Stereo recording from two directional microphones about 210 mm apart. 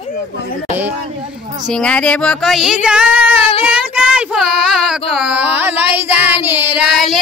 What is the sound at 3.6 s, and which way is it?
Child singing, 5° right (ahead or behind).